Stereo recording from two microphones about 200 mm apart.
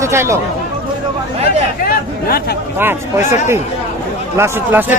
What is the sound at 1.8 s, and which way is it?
Speech, 50° left (ahead or behind).